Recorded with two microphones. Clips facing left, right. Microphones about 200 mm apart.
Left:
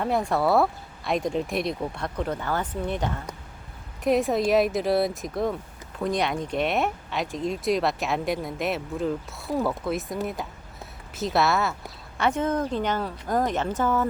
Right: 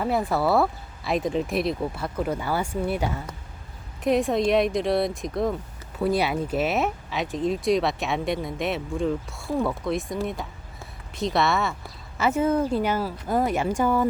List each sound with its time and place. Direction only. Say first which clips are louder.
0.0 s speech: even; centre (ahead or behind)